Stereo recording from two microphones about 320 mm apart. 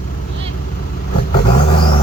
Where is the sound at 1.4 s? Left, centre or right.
Centre.